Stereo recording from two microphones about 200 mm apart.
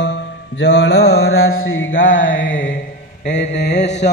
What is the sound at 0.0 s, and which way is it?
Mantra, 60° left (ahead or behind).